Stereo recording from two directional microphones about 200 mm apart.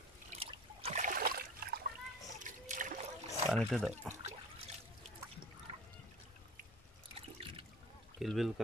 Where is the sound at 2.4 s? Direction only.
40° right (ahead or behind).